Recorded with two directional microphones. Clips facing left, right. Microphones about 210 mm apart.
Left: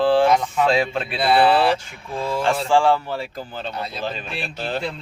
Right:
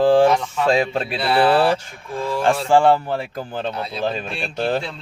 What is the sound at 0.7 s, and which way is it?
Speech, 40° right (ahead or behind).